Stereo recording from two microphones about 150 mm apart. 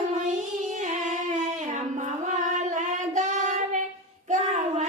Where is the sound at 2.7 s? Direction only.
55° right (ahead or behind).